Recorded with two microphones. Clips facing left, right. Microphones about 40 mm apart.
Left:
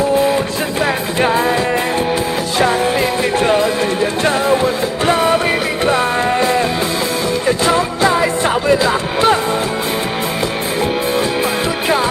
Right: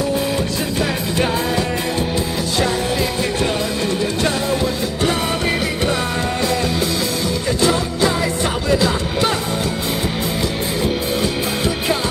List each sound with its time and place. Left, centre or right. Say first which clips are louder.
0.8 s music: left 4 dB; left
4.5 s music: left 5 dB; left
5.9 s music: left 6 dB; left